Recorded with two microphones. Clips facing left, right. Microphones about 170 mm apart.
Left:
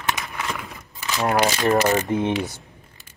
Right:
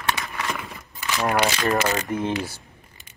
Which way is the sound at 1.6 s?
25° left (ahead or behind).